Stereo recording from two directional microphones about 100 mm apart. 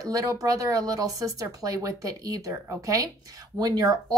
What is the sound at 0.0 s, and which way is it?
Speech, 35° right (ahead or behind).